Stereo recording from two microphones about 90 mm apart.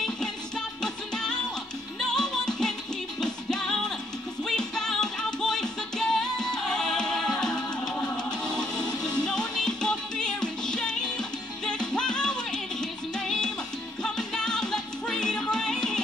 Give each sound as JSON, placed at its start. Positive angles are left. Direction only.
{"t": 0.8, "sound": "music", "side_deg": 10}
{"t": 9.2, "sound": "music", "side_deg": 10}